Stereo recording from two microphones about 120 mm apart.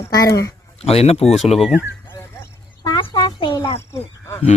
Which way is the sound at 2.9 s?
40° left (ahead or behind).